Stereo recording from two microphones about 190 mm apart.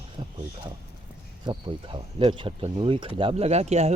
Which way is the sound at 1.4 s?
25° right (ahead or behind).